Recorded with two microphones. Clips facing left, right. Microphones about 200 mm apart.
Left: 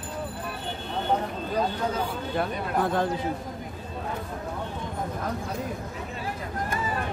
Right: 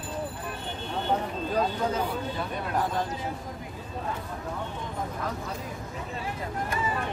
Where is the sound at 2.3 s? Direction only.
60° left (ahead or behind).